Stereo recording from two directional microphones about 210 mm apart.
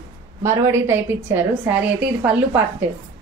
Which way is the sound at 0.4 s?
10° right (ahead or behind).